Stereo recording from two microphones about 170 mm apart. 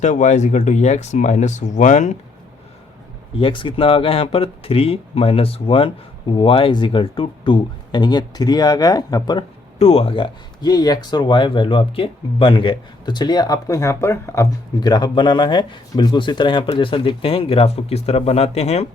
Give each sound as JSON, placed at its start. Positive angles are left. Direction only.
{"t": 0.0, "sound": "speech", "side_deg": 45}
{"t": 3.3, "sound": "speech", "side_deg": 30}
{"t": 9.7, "sound": "speech", "side_deg": 35}